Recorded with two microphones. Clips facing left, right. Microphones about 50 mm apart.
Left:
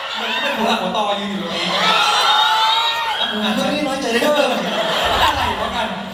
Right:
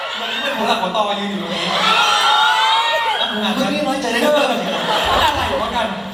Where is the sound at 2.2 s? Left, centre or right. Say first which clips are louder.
Right 1 dB; right.